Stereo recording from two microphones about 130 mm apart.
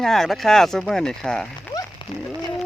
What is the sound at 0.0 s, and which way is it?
Speech, 5° left (ahead or behind).